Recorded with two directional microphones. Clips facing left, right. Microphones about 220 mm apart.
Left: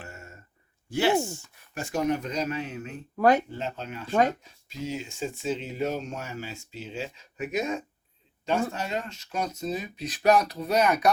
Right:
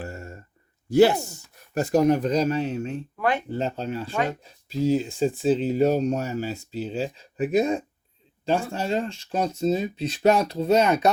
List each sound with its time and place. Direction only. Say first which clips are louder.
0.0 s a sound: right 9 dB; 35° right (ahead or behind)
0.9 s speech: right 7 dB; 40° right (ahead or behind)
3.2 s speech: left 5 dB; 40° left (ahead or behind)
3.5 s speech: right 7 dB; 35° right (ahead or behind)